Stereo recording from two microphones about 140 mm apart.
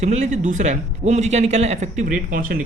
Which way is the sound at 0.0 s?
55° right (ahead or behind).